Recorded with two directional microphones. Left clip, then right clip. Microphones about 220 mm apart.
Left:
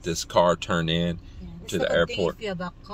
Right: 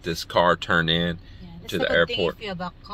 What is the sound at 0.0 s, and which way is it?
Speech, 5° left (ahead or behind).